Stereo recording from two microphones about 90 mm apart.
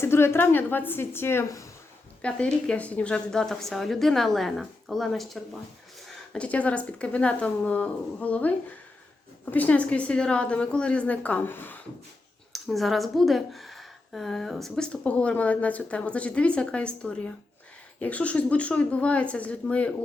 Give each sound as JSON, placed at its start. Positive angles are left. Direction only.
{"t": 0.0, "sound": "a woman's voice", "side_deg": 25}
{"t": 2.2, "sound": "a woman's voice", "side_deg": 10}
{"t": 6.3, "sound": "speech", "side_deg": 15}
{"t": 12.5, "sound": "speech", "side_deg": 0}